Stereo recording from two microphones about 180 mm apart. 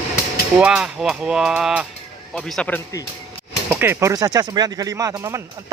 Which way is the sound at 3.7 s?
10° right (ahead or behind).